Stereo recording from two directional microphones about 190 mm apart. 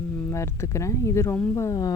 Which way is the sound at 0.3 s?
15° left (ahead or behind).